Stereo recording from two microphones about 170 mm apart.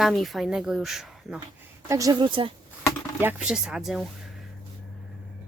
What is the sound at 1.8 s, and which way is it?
Speech, 20° right (ahead or behind).